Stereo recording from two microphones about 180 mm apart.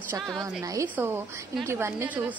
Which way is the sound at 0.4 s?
20° right (ahead or behind).